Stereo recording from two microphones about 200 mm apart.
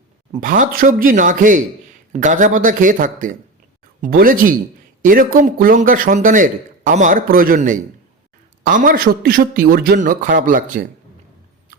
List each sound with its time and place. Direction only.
0.3 s speech: 40° right (ahead or behind)